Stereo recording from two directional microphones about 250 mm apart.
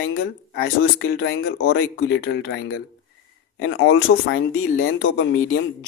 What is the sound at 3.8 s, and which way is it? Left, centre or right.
Speech, left.